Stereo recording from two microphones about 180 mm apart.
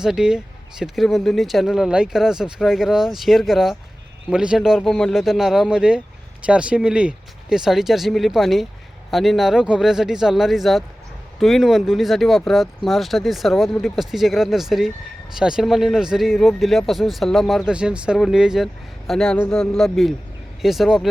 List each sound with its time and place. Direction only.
0.0 s speech: 5° right (ahead or behind)